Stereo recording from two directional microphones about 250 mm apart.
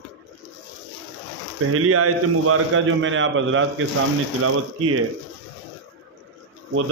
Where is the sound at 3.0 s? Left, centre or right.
Right.